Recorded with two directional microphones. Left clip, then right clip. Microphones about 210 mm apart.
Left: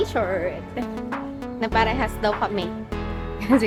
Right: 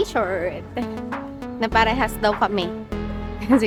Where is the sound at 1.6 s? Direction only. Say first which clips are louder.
Right 3 dB; 30° right (ahead or behind).